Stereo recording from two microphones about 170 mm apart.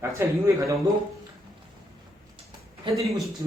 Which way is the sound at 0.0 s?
15° right (ahead or behind).